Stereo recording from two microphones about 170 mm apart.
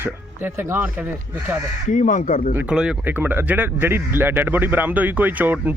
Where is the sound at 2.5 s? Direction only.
5° right (ahead or behind).